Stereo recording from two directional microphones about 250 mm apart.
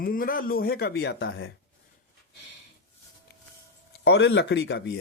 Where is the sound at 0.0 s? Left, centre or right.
Left.